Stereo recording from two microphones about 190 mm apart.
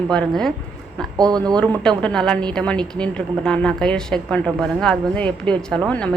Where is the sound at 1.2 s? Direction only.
20° right (ahead or behind).